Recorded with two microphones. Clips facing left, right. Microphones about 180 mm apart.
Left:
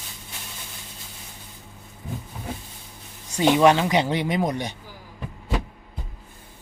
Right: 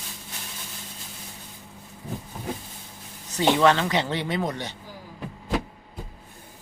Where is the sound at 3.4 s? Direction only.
15° left (ahead or behind).